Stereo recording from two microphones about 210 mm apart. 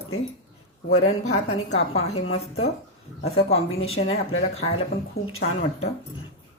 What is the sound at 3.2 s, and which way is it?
Speech, 30° left (ahead or behind).